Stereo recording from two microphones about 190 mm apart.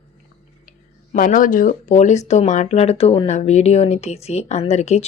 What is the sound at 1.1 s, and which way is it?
Speech, 45° left (ahead or behind).